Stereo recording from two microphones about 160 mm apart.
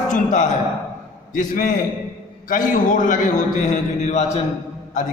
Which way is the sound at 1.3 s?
55° left (ahead or behind).